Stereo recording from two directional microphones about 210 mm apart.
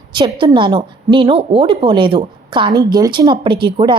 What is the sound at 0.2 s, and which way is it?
Speech, 20° right (ahead or behind).